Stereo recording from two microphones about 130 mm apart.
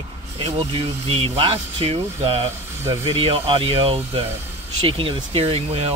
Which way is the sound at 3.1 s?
45° right (ahead or behind).